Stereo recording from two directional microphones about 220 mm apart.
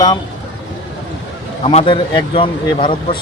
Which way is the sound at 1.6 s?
25° left (ahead or behind).